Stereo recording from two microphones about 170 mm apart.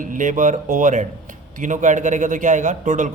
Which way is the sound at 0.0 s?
50° right (ahead or behind).